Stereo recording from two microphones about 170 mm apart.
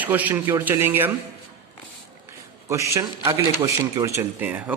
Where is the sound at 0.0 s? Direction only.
10° right (ahead or behind).